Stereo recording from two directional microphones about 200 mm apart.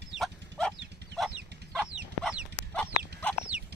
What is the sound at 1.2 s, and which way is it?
Chicken, centre (ahead or behind).